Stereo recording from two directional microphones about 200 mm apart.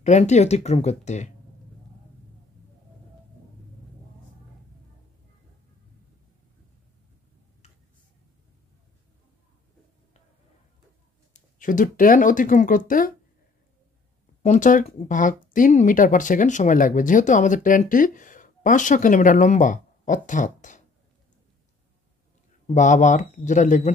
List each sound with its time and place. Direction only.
0.0 s speech: 35° left (ahead or behind)
11.3 s speech: 40° left (ahead or behind)
14.4 s speech: 40° left (ahead or behind)
22.8 s speech: 35° left (ahead or behind)